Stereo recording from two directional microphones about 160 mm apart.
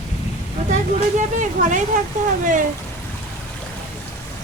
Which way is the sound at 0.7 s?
50° right (ahead or behind).